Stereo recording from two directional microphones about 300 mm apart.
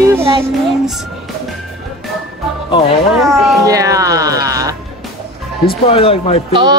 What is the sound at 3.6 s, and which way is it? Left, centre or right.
Speech, centre.